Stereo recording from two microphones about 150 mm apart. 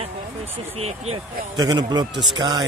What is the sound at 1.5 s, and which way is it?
A man's voice, 25° right (ahead or behind).